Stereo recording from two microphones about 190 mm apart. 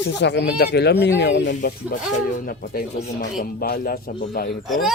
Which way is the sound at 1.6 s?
45° left (ahead or behind).